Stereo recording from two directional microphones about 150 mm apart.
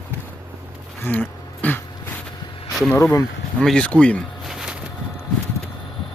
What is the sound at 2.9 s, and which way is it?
Speech, 15° left (ahead or behind).